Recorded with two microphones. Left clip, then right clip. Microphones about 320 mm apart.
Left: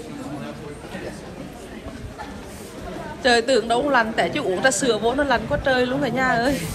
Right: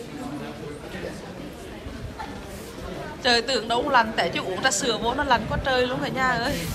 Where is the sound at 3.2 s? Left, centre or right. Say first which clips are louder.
Left 4 dB; centre.